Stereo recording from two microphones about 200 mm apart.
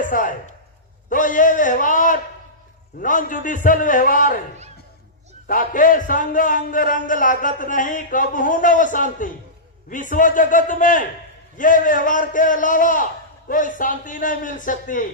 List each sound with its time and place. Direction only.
0.0 s a sound: 40° left (ahead or behind)
1.1 s speech: 40° left (ahead or behind)
5.5 s speech: 45° left (ahead or behind)